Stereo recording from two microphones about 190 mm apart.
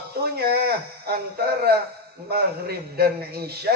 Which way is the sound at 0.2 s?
55° right (ahead or behind).